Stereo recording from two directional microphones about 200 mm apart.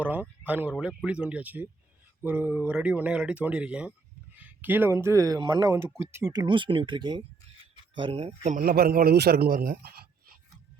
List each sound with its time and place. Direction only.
0.0 s speech: 10° right (ahead or behind); by 8.5 s 30° right (ahead or behind)
8.5 s speech: 50° right (ahead or behind)